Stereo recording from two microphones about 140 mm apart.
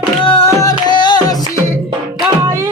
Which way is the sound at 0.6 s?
30° left (ahead or behind).